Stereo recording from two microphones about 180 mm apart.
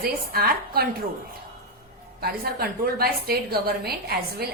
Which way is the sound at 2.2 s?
60° right (ahead or behind).